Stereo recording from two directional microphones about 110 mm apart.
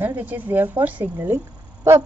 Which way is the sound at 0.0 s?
15° right (ahead or behind).